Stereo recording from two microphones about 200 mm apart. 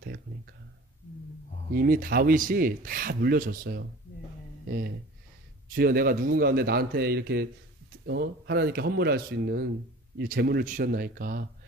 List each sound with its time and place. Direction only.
1.7 s speech: 45° right (ahead or behind)
4.6 s a sound: 50° right (ahead or behind)
5.7 s speech: 45° right (ahead or behind)